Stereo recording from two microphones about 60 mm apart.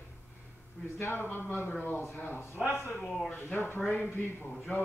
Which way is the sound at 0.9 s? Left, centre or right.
Left.